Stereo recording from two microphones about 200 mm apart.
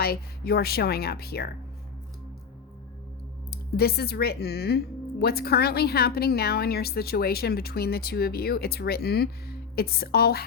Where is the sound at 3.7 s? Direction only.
50° left (ahead or behind).